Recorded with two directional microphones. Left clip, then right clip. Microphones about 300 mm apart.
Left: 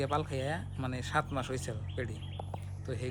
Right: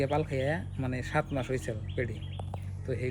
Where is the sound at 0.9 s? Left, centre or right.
Left.